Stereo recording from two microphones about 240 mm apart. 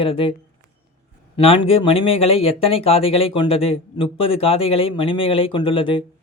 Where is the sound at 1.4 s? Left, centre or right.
Left.